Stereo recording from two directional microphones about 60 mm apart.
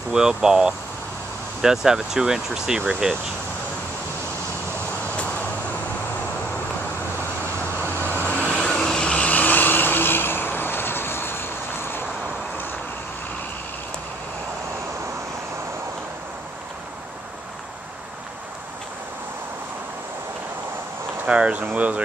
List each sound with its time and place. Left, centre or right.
0.1 s speech: centre
5.1 s vehicle: left
7.8 s vehicle: left
8.3 s vehicle: centre
9.3 s vehicle: left
21.3 s speech: centre